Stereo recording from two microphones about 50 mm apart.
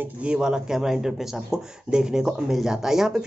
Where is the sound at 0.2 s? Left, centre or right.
Centre.